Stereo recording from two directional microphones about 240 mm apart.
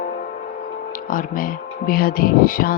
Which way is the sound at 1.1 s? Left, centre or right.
Left.